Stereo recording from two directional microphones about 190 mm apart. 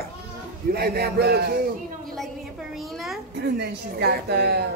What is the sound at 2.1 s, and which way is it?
A woman's voice, centre (ahead or behind).